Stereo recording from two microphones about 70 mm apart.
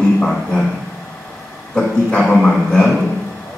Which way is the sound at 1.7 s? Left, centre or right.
Centre.